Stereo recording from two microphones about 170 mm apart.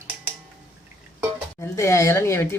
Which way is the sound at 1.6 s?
15° left (ahead or behind).